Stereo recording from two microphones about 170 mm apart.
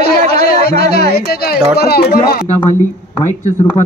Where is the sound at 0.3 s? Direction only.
65° left (ahead or behind).